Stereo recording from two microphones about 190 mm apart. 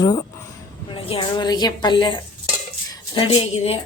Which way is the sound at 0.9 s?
25° left (ahead or behind).